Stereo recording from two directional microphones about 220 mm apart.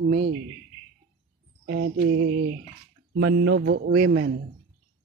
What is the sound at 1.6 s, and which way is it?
Speech, 50° right (ahead or behind).